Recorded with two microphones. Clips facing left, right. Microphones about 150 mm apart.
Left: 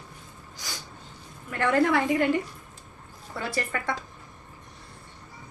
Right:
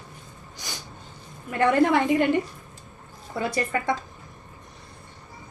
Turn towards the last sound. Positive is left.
turn(degrees=-20)  # may be behind; listen again after turning